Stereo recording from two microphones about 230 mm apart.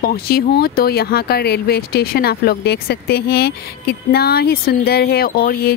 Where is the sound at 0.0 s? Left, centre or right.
Left.